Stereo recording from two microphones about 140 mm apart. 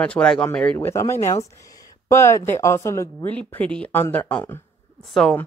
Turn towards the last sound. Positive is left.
turn(degrees=5)  # may be behind; listen again after turning